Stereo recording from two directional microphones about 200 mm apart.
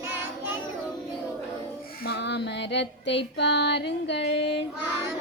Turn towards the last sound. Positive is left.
turn(degrees=60)  # may be behind; listen again after turning